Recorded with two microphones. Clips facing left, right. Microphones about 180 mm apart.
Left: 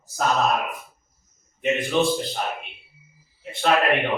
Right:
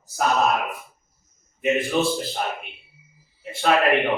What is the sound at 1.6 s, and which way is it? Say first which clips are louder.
Speech: even; centre (ahead or behind).